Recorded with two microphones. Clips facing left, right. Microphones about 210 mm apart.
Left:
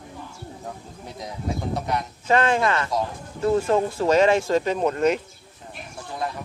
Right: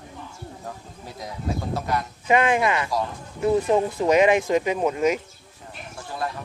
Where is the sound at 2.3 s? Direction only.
15° right (ahead or behind).